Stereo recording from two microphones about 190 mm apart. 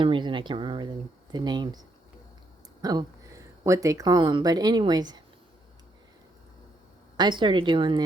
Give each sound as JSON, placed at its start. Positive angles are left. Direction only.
{"t": 0.0, "sound": "speech", "side_deg": -25}
{"t": 2.8, "sound": "speech", "side_deg": -20}
{"t": 7.2, "sound": "speech", "side_deg": -25}